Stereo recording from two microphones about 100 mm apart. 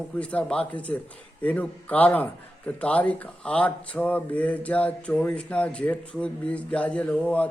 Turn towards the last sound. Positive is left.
turn(degrees=15)  # may be behind; listen again after turning